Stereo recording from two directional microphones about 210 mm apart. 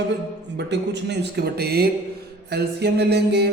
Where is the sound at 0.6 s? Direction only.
55° right (ahead or behind).